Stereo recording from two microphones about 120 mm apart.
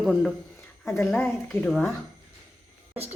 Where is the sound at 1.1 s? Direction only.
15° left (ahead or behind).